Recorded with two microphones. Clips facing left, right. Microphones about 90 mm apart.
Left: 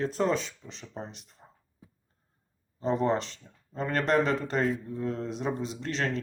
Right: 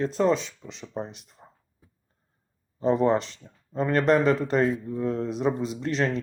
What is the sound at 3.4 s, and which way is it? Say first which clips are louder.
A man's voice: right 6 dB; 20° right (ahead or behind).